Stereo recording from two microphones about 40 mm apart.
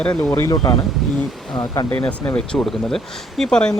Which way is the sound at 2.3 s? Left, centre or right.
Left.